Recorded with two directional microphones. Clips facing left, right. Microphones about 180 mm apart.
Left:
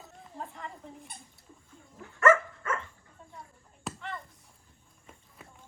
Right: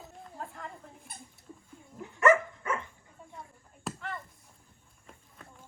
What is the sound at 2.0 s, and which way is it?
Dog, 15° right (ahead or behind).